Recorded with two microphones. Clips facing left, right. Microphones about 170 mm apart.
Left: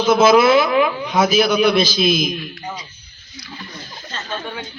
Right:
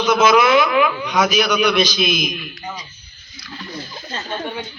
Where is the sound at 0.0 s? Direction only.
30° left (ahead or behind).